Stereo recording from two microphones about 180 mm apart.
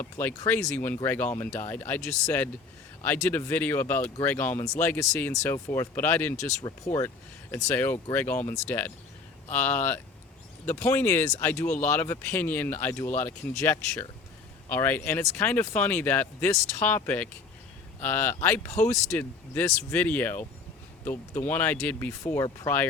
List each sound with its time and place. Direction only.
0.0 s speech: 10° left (ahead or behind)